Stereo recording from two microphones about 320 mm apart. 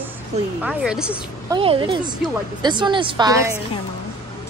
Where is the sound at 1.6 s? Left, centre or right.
Centre.